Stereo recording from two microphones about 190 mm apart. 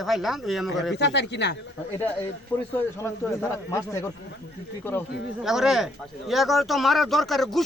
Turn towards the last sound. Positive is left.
turn(degrees=0)  # may be behind; listen again after turning